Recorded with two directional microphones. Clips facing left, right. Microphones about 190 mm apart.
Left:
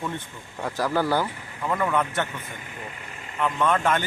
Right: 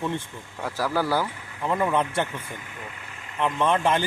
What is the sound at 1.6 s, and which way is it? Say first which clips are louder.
Speech: right 1 dB; 20° right (ahead or behind).